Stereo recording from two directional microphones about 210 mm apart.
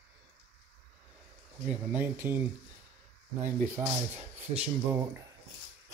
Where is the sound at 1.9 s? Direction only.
10° right (ahead or behind).